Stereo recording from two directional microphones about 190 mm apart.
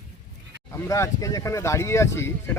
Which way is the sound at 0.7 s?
15° left (ahead or behind).